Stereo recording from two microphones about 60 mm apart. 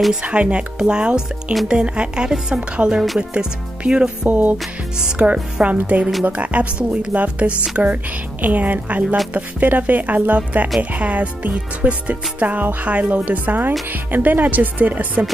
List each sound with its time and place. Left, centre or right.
0.1 s a woman's voice: centre
4.3 s speech: right